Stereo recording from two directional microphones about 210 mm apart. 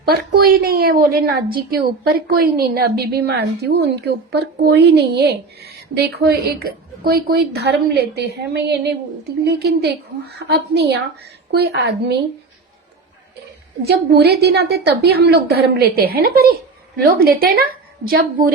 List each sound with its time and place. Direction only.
0.1 s a woman's voice: 45° right (ahead or behind)
13.8 s a woman's voice: 50° right (ahead or behind)